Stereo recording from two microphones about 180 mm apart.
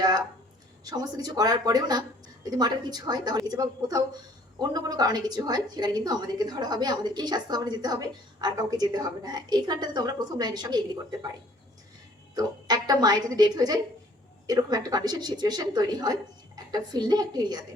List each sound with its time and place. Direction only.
0.9 s a woman's voice: 20° right (ahead or behind)
12.3 s a woman's voice: 20° right (ahead or behind)